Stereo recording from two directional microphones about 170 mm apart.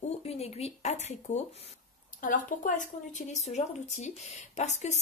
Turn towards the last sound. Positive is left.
turn(degrees=40)  # may be behind; listen again after turning